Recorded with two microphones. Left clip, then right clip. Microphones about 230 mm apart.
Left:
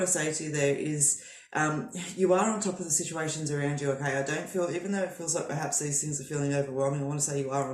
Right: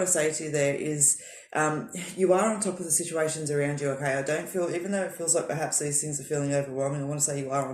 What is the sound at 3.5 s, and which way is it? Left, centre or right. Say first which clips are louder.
Speech: right 4 dB; right.